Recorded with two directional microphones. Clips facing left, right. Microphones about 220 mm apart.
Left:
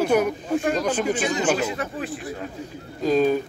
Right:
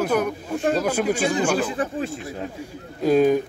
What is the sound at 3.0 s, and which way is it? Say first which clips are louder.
Speech: right 2 dB; 10° right (ahead or behind).